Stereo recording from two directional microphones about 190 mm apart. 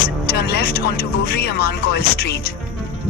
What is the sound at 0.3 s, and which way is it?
Speech, 55° left (ahead or behind).